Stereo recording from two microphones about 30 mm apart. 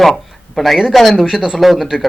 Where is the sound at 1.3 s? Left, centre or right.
Centre.